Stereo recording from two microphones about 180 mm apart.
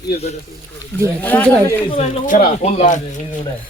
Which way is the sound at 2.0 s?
45° left (ahead or behind).